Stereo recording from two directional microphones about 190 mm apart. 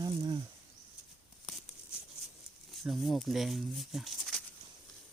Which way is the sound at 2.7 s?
Centre (ahead or behind).